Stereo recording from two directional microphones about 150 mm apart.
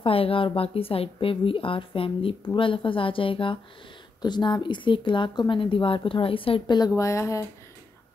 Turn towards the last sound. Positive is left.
turn(degrees=20)  # may be behind; listen again after turning